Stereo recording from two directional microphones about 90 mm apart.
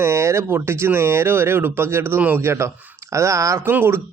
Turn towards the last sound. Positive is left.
turn(degrees=-25)  # may be behind; listen again after turning